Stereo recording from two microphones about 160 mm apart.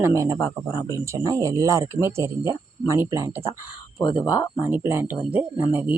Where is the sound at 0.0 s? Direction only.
20° right (ahead or behind).